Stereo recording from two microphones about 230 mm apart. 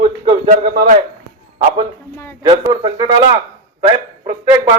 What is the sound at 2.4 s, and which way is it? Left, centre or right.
Speech, centre.